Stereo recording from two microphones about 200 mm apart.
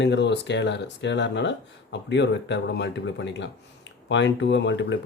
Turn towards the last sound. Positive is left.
turn(degrees=65)  # may be behind; listen again after turning